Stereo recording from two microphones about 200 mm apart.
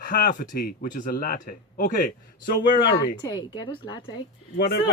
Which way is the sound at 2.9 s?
20° left (ahead or behind).